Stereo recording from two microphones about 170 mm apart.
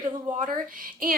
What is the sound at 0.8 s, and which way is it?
Speech, 55° right (ahead or behind).